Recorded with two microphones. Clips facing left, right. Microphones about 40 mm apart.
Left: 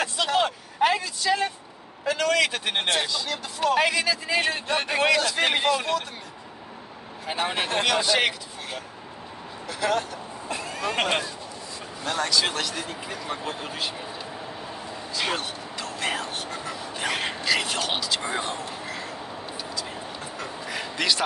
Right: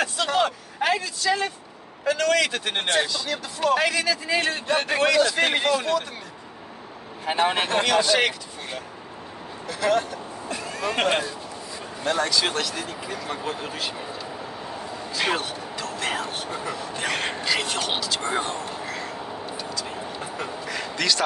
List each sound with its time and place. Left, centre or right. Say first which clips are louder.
0.0 s vehicle: right 1 dB; centre
0.9 s speech: even; centre
2.9 s speech: right 5 dB; centre
7.3 s speech: right 5 dB; centre
7.6 s speech: right 3 dB; centre
15.1 s speech: right 3 dB; centre
15.8 s vehicle: right 1 dB; centre
16.7 s speech: even; centre
18.7 s a sound: right 2 dB; centre
20.2 s quack: right 3 dB; centre
20.6 s a sound: even; centre